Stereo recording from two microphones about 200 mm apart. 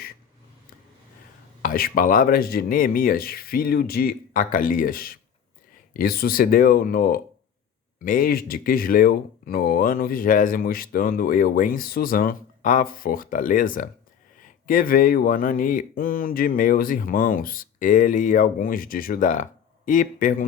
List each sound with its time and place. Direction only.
1.6 s speech: 45° left (ahead or behind)